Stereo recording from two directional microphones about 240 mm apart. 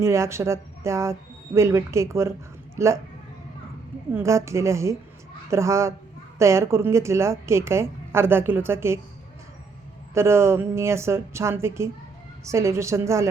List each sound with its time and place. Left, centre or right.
0.0 s a woman's voice: centre
4.1 s a woman's voice: centre
10.2 s a woman's voice: centre